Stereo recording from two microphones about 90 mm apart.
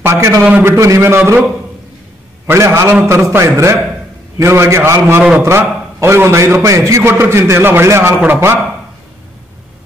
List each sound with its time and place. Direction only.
0.0 s a man's voice: 30° right (ahead or behind)
0.4 s a man's voice: 20° right (ahead or behind)
0.7 s a man's voice: 35° right (ahead or behind)
2.4 s a man's voice: 30° right (ahead or behind)